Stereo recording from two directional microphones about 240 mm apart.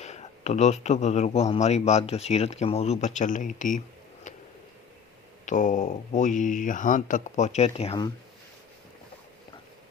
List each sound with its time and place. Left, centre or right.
0.0 s speech: left
5.5 s speech: left